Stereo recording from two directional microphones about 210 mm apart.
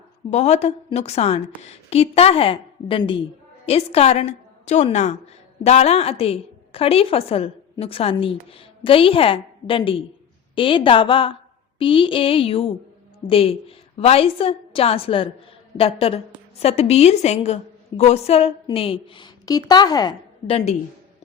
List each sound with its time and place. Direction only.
0.3 s a woman's voice: 30° left (ahead or behind)